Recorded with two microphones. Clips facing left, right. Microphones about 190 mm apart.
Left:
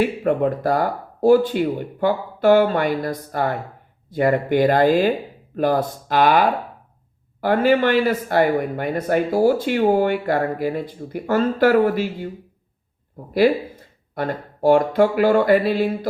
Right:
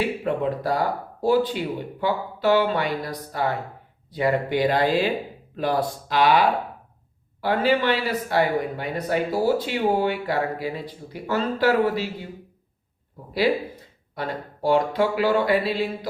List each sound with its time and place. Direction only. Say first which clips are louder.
0.0 s speech: left 5 dB; 50° left (ahead or behind)
13.4 s speech: left 3 dB; 50° left (ahead or behind)